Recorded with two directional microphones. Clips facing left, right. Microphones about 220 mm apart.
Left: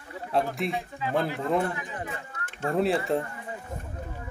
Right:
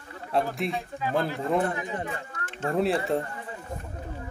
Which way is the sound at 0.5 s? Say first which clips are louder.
Even; centre (ahead or behind).